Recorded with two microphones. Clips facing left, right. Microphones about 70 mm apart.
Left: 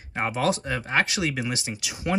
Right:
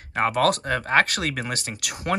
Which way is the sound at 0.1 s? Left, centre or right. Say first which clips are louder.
Right 4 dB; right.